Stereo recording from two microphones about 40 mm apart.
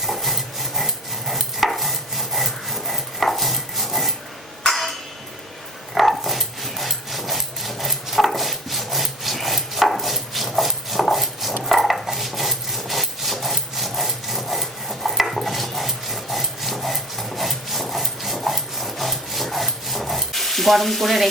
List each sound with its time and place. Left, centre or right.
0.0 s rub: centre
4.7 s a sound: centre
5.9 s dog: centre